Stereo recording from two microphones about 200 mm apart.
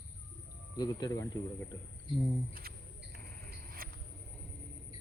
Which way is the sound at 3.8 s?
45° right (ahead or behind).